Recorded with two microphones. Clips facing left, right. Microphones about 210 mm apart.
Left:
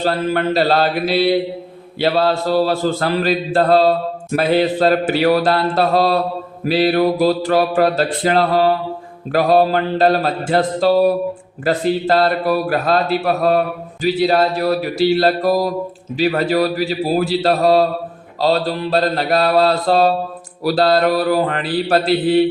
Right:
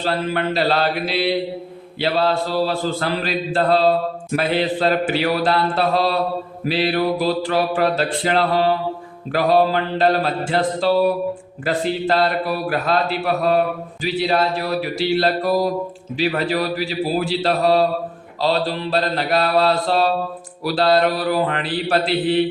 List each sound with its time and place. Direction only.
0.0 s mantra: 40° left (ahead or behind)
10.5 s speech: 45° left (ahead or behind)
11.6 s mantra: 40° left (ahead or behind)